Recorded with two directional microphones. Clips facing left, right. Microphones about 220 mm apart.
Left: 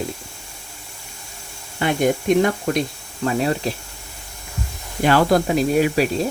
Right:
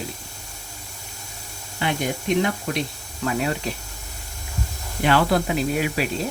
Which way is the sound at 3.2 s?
35° left (ahead or behind).